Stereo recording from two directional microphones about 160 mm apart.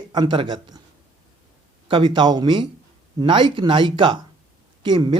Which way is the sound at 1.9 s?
30° right (ahead or behind).